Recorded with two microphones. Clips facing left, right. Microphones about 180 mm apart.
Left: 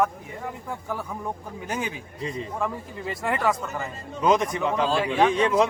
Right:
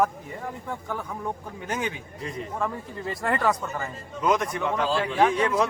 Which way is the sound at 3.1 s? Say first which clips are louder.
Even; centre (ahead or behind).